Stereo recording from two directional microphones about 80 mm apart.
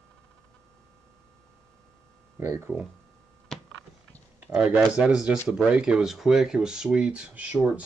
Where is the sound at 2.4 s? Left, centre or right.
Right.